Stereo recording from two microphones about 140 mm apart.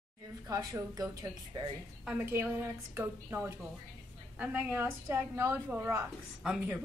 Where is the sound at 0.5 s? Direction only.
25° right (ahead or behind).